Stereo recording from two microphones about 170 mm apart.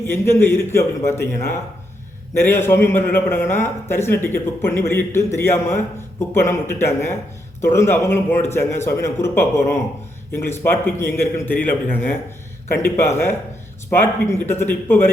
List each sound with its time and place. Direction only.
0.0 s a man's voice: 15° left (ahead or behind)